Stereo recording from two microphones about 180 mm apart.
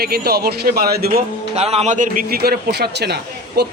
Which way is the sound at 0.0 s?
60° right (ahead or behind).